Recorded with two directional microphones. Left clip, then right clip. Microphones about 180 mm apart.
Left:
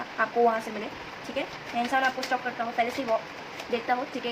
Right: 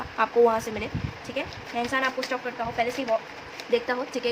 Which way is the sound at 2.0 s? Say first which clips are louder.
Left 1 dB; 25° right (ahead or behind).